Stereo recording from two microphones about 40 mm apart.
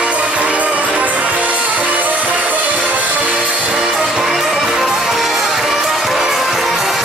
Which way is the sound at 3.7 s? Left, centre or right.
Centre.